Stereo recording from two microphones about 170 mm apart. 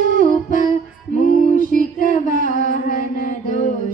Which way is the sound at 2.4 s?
50° left (ahead or behind).